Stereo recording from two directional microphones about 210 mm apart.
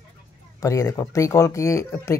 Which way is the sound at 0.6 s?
15° left (ahead or behind).